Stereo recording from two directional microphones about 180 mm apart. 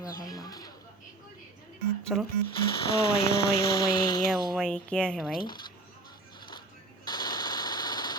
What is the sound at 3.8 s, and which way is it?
Speech, 25° left (ahead or behind).